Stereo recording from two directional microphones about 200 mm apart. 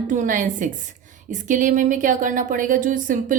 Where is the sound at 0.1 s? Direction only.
40° right (ahead or behind).